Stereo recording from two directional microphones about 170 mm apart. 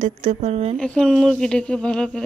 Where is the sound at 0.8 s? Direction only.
5° left (ahead or behind).